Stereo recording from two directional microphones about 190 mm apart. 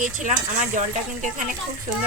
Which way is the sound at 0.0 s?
40° right (ahead or behind).